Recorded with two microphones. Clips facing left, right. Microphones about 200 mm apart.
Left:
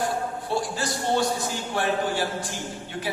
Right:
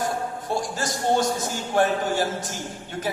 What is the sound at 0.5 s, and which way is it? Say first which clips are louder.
A man's voice: even; 45° right (ahead or behind).